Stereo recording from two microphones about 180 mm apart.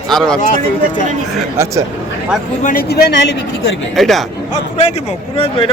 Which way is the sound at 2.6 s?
55° left (ahead or behind).